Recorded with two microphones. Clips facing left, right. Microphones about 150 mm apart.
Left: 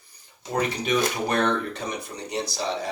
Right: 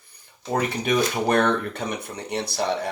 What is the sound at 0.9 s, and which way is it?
Speech, 55° right (ahead or behind).